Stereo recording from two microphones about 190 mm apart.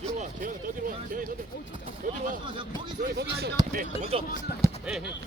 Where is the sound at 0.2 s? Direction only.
45° right (ahead or behind).